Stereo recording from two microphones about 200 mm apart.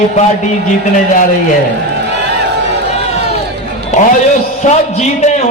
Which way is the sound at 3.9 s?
40° left (ahead or behind).